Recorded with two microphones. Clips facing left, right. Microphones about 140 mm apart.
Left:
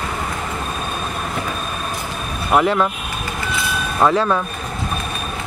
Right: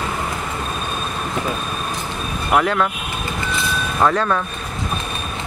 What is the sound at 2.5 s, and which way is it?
Speech, 10° left (ahead or behind).